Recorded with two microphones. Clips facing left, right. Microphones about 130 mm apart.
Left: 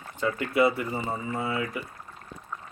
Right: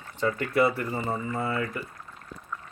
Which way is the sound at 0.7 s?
20° left (ahead or behind).